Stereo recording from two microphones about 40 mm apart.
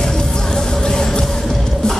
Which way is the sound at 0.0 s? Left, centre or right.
Centre.